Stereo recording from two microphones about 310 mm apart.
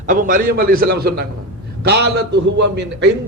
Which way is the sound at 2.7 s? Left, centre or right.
Right.